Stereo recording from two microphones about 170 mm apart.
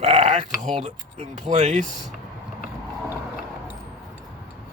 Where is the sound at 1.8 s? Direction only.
Centre (ahead or behind).